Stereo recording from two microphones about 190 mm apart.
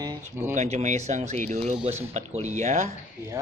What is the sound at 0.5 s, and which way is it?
Mantra, 35° right (ahead or behind).